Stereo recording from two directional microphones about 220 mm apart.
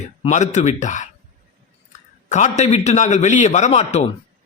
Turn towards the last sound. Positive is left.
turn(degrees=30)  # may be behind; listen again after turning